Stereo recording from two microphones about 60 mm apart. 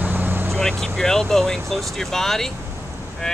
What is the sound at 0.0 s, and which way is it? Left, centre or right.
Vehicle, right.